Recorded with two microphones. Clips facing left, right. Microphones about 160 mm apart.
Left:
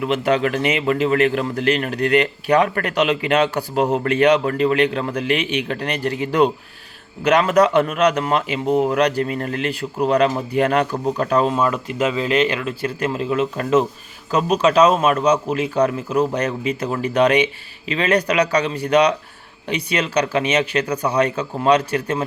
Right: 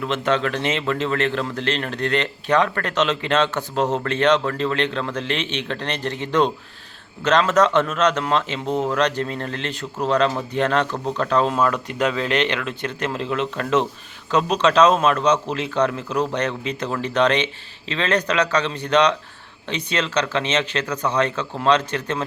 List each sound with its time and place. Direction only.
0.0 s speech: 10° left (ahead or behind)